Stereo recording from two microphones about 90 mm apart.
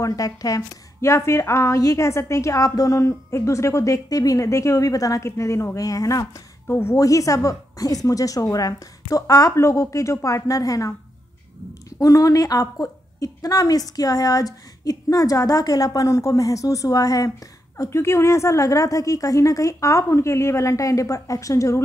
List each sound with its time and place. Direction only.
0.0 s a woman's voice: 40° left (ahead or behind)
6.7 s a woman's voice: 25° left (ahead or behind)
7.0 s a woman's voice: 40° left (ahead or behind)
12.0 s a woman's voice: 40° left (ahead or behind)
17.7 s a woman's voice: 30° left (ahead or behind)